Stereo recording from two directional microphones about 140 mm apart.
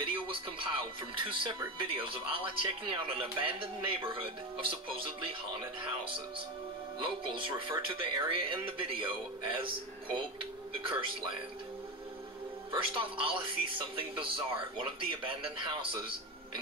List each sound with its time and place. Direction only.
0.0 s music: 40° right (ahead or behind)
1.3 s a man's voice: 35° right (ahead or behind)
12.7 s a man's voice: 40° right (ahead or behind)